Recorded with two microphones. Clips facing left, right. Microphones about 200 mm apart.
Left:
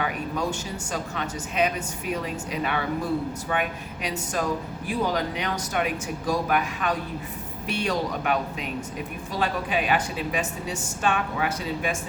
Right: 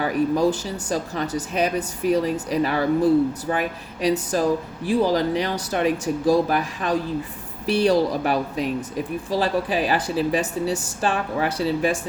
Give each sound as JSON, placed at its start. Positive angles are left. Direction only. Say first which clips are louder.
{"t": 0.0, "sound": "a woman's voice", "louder": "right 8 dB", "side_deg": -35}